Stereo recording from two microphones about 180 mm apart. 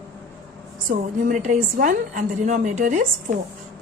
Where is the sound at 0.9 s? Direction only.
45° right (ahead or behind).